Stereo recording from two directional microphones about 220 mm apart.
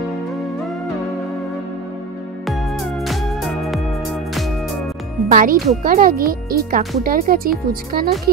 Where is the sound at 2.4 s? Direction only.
Centre (ahead or behind).